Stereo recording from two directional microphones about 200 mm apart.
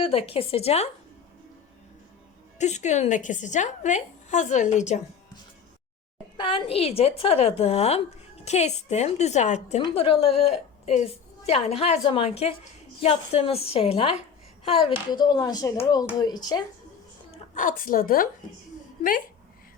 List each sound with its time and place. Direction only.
0.0 s a woman's voice: 30° left (ahead or behind)
2.6 s a woman's voice: 35° left (ahead or behind)
6.3 s a woman's voice: 25° left (ahead or behind)
17.5 s a woman's voice: 40° left (ahead or behind)